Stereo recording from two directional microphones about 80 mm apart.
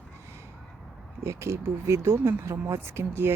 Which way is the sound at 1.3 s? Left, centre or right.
Right.